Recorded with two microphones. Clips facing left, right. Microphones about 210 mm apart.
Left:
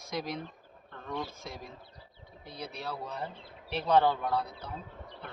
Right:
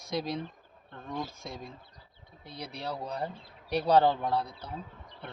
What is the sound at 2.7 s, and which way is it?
Speech, 35° right (ahead or behind).